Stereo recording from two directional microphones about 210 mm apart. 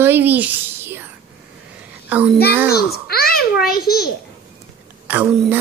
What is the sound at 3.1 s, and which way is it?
A child's voice, 45° left (ahead or behind).